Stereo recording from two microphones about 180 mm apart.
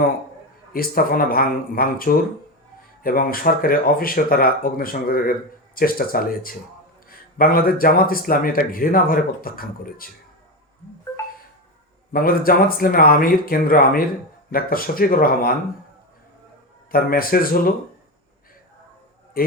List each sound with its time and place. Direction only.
0.7 s speech: 55° left (ahead or behind)
12.1 s speech: 55° left (ahead or behind)
16.9 s speech: 55° left (ahead or behind)